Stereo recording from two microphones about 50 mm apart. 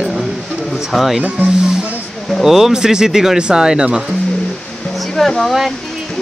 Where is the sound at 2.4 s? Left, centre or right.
Centre.